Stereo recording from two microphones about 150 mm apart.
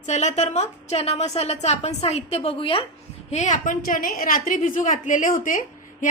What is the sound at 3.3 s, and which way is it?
A woman's voice, 50° left (ahead or behind).